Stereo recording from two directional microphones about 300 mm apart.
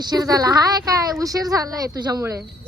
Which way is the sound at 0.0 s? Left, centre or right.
Centre.